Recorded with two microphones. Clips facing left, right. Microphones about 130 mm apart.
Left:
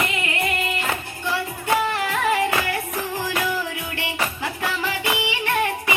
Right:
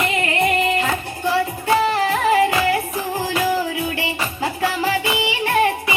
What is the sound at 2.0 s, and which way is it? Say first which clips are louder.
Music: right 5 dB; 35° right (ahead or behind).